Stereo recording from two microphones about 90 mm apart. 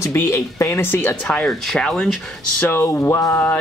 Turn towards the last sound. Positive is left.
turn(degrees=25)  # may be behind; listen again after turning